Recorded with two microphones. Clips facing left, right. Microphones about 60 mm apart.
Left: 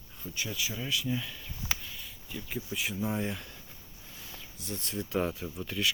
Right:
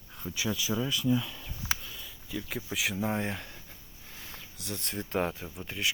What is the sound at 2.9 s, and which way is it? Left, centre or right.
Speech, right.